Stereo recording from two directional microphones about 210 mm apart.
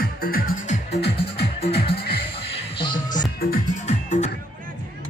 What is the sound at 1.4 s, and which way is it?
Music, 25° left (ahead or behind).